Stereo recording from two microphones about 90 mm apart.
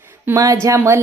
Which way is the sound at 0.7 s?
40° right (ahead or behind).